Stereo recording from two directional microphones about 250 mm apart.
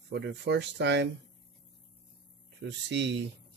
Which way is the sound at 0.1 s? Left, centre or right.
Right.